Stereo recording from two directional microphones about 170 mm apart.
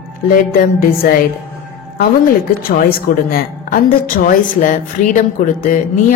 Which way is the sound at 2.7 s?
60° left (ahead or behind).